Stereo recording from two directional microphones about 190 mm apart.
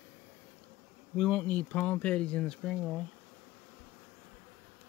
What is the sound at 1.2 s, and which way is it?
Speech, 5° left (ahead or behind).